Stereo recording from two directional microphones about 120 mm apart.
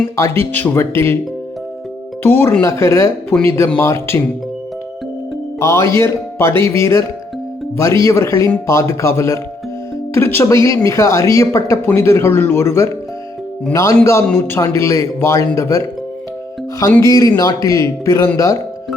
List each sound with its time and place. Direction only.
0.2 s speech: 20° left (ahead or behind)
2.2 s speech: 15° left (ahead or behind)
5.5 s speech: 25° left (ahead or behind)
8.0 s speech: 25° left (ahead or behind)
17.0 s speech: 30° left (ahead or behind)